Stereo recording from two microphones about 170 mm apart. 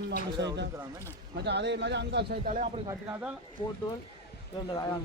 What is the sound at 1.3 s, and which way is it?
Speech, 85° right.